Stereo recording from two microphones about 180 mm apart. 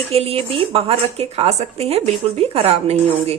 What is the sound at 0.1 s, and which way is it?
Speech, 35° right (ahead or behind).